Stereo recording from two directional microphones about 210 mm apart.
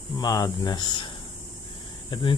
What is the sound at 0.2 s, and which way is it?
Speech, 15° left (ahead or behind).